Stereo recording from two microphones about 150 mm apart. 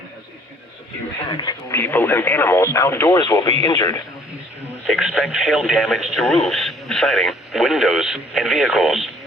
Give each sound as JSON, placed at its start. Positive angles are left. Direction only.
{"t": 1.3, "sound": "a man's voice", "side_deg": 30}
{"t": 1.7, "sound": "a man's voice", "side_deg": 15}
{"t": 4.9, "sound": "speech", "side_deg": -5}